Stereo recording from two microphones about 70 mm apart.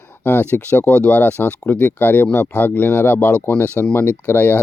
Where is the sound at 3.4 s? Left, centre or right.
Left.